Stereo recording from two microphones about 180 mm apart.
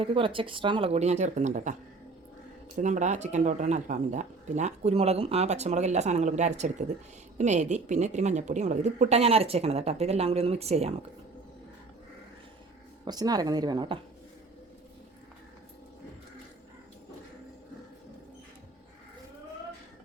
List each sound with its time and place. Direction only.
0.0 s speech: 30° right (ahead or behind)
2.7 s speech: 40° right (ahead or behind)
13.1 s a woman's voice: 20° right (ahead or behind)